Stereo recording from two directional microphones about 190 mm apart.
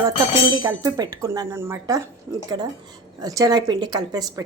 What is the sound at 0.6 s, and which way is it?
Speech, 20° right (ahead or behind).